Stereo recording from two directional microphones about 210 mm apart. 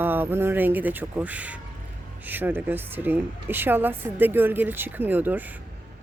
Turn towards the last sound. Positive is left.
turn(degrees=-10)  # may be behind; listen again after turning